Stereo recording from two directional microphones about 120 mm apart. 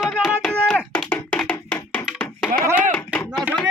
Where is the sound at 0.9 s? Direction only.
15° left (ahead or behind).